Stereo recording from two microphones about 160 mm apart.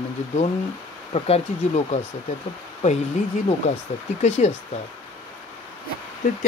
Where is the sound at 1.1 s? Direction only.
40° left (ahead or behind).